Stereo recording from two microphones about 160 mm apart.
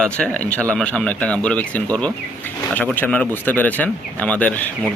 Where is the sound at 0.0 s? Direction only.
5° left (ahead or behind).